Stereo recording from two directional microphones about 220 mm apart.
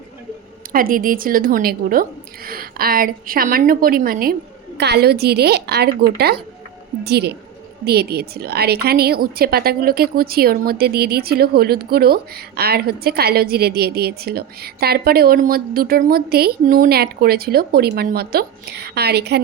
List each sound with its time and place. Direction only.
0.7 s a woman's voice: 40° right (ahead or behind)